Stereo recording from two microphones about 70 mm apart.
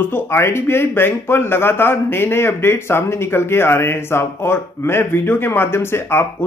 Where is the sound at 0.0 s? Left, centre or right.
Left.